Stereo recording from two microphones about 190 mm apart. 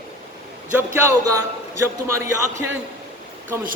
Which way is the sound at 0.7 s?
15° right (ahead or behind).